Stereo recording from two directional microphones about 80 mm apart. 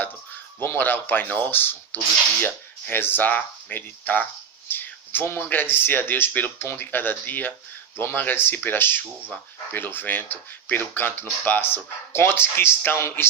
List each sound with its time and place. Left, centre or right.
0.6 s speech: left